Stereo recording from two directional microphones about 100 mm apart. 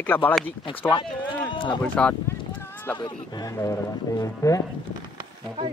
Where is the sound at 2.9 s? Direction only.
45° left (ahead or behind).